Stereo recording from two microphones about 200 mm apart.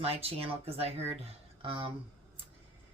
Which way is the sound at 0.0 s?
30° right (ahead or behind).